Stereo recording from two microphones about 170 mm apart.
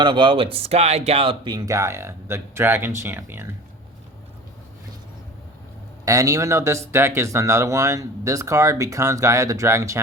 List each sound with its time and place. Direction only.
0.0 s speech: 30° right (ahead or behind); by 3.4 s 10° right (ahead or behind)
6.1 s speech: 20° right (ahead or behind)